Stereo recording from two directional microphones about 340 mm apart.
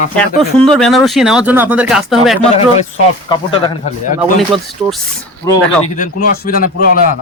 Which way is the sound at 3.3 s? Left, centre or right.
Centre.